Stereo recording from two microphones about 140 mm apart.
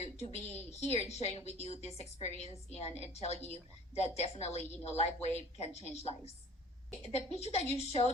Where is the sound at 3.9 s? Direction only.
50° left (ahead or behind).